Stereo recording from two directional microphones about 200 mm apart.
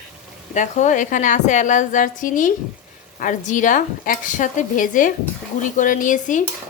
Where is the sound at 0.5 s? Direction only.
40° left (ahead or behind).